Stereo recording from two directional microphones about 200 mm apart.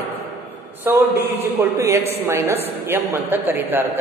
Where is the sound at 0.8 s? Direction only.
10° right (ahead or behind).